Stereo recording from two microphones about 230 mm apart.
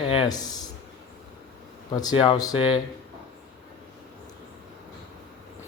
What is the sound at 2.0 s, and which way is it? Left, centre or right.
Speech, centre.